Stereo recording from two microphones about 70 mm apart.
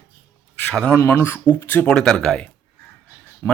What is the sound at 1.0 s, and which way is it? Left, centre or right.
Speech, left.